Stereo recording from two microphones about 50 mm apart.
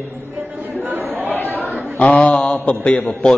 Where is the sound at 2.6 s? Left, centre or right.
Left.